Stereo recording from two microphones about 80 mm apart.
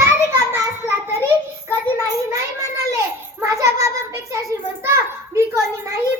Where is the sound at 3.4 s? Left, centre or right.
Right.